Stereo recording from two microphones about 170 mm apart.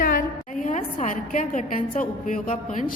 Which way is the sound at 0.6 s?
45° left (ahead or behind).